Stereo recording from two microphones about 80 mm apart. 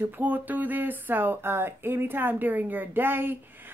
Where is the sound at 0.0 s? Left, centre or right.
Right.